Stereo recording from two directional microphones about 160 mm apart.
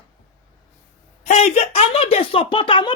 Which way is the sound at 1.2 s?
45° left (ahead or behind).